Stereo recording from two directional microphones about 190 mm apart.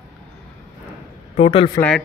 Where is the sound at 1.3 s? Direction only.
30° left (ahead or behind).